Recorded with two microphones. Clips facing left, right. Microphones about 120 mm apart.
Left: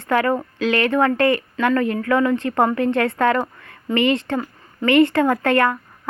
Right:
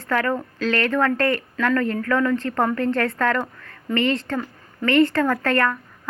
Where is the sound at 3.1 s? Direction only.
25° left (ahead or behind).